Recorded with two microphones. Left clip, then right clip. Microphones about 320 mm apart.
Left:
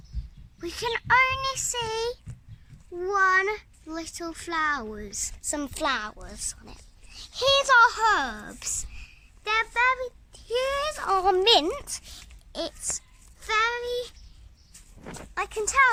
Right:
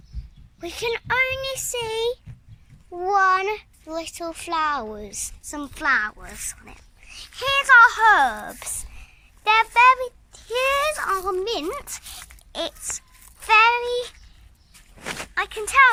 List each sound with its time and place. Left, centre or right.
0.6 s a child's voice: centre
5.5 s a child's voice: centre
11.3 s speech: left
11.6 s a child's voice: centre
14.9 s a sound: right
15.4 s a child's voice: centre